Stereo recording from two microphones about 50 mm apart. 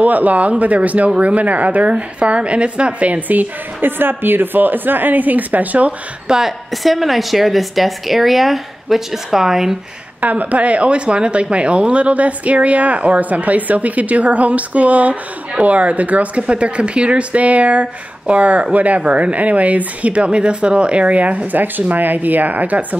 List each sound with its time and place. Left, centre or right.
0.0 s speech: right
6.2 s a woman's voice: centre
6.7 s a woman's voice: centre
10.2 s speech: right